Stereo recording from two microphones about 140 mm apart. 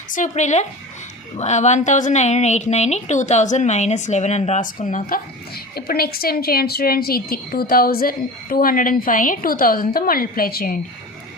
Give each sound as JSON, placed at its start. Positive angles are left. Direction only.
{"t": 0.1, "sound": "a woman's voice", "side_deg": 60}